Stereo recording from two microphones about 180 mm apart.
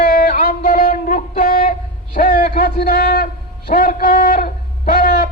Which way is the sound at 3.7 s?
50° left (ahead or behind).